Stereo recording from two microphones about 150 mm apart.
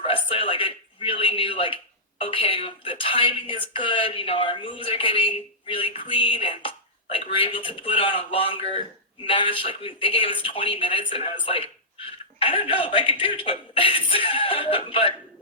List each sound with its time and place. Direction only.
0.0 s a man's voice: 35° left (ahead or behind)